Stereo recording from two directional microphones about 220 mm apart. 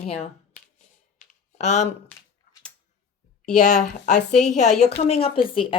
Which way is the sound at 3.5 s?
35° left (ahead or behind).